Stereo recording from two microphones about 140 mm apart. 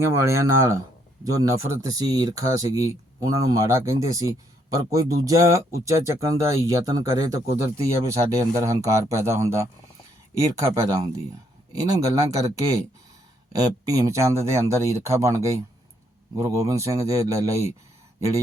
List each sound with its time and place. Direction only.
0.0 s speech: 20° right (ahead or behind)
10.8 s speech: 25° right (ahead or behind)